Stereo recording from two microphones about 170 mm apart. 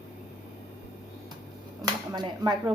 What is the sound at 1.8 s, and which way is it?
Speech, 25° right (ahead or behind).